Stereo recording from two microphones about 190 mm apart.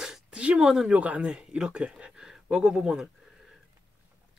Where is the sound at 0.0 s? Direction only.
5° right (ahead or behind).